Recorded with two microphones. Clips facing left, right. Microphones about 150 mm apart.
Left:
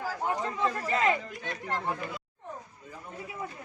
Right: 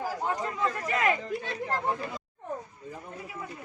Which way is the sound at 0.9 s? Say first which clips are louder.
Even; 30° left (ahead or behind).